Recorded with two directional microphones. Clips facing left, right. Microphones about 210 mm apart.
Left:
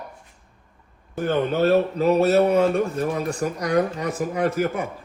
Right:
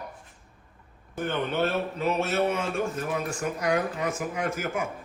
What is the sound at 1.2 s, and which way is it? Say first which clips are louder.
Speech: left 7 dB; 40° left (ahead or behind).